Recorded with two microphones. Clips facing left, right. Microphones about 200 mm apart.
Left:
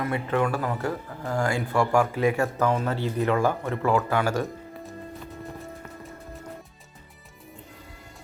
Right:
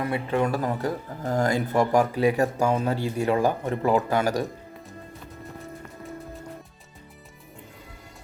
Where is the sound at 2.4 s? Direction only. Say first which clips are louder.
Right 1 dB; 15° right (ahead or behind).